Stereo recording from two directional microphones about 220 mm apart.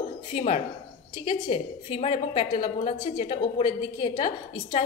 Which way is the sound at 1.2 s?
25° left (ahead or behind).